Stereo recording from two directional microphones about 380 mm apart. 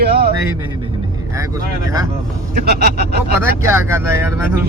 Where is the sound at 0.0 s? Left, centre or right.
Right.